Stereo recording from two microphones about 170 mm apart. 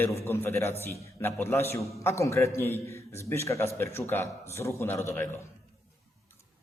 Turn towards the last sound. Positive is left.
turn(degrees=15)  # may be behind; listen again after turning